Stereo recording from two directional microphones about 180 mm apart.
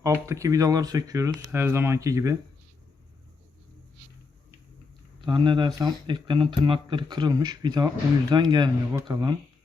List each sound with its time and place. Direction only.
0.0 s speech: 15° right (ahead or behind)
5.2 s speech: 25° right (ahead or behind)